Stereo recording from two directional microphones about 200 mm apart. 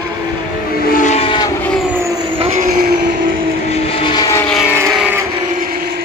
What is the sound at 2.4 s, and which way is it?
Train, 45° right (ahead or behind).